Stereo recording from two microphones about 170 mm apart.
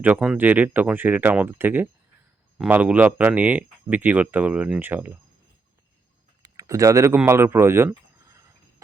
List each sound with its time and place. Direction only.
0.0 s speech: 10° right (ahead or behind)
6.4 s speech: 20° right (ahead or behind)